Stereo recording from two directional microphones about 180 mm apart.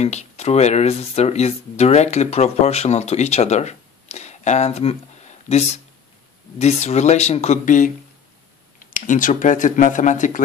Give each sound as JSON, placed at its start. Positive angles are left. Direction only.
{"t": 0.0, "sound": "speech", "side_deg": 40}